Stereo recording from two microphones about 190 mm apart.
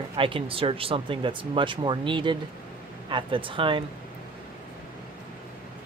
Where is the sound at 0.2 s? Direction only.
30° right (ahead or behind).